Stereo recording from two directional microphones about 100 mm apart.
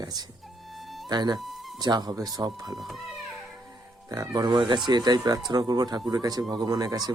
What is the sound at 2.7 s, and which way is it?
Speech, centre (ahead or behind).